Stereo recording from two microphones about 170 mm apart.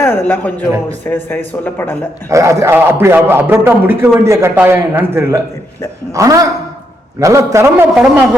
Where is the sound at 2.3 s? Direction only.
15° right (ahead or behind).